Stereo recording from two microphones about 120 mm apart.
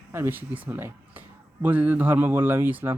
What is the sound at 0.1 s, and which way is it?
Speech, 20° right (ahead or behind).